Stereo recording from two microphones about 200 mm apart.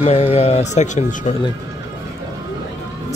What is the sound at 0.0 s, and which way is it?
Speech, 30° left (ahead or behind).